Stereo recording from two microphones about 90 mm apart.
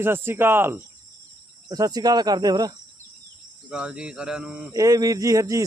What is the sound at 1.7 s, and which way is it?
Cricket, 45° right (ahead or behind).